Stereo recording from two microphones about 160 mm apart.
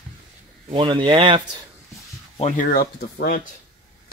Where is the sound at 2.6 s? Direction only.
65° left (ahead or behind).